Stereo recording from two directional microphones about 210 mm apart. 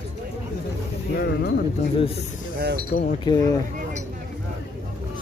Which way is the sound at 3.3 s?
20° left (ahead or behind).